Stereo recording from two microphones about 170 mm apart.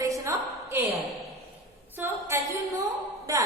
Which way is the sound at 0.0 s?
20° right (ahead or behind).